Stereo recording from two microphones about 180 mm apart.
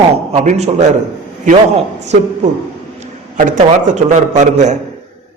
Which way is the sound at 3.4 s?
45° right (ahead or behind).